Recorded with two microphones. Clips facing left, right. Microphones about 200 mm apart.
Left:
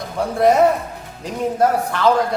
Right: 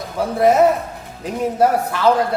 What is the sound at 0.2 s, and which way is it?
Speech, centre (ahead or behind).